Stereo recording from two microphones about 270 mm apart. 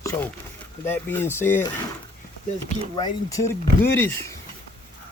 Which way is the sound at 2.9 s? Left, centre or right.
Centre.